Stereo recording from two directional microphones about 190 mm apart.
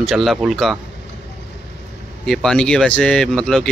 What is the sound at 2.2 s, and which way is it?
Speech, 5° left (ahead or behind).